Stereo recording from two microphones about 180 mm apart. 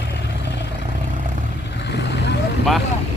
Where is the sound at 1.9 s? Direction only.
75° left (ahead or behind).